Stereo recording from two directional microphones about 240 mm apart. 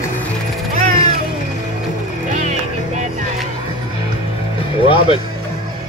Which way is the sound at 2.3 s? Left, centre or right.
Right.